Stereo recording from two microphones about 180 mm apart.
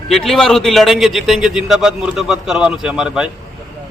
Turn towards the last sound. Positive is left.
turn(degrees=-5)  # may be behind; listen again after turning